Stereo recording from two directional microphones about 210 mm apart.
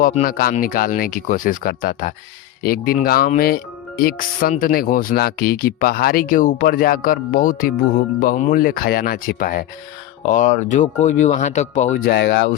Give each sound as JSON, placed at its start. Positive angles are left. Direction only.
{"t": 0.0, "sound": "speech", "side_deg": 40}
{"t": 12.1, "sound": "speech", "side_deg": 55}